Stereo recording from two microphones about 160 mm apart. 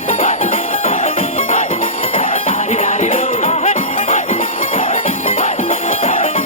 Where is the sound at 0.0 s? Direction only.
45° left (ahead or behind).